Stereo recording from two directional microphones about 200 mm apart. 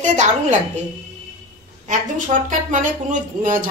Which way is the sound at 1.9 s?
40° right (ahead or behind).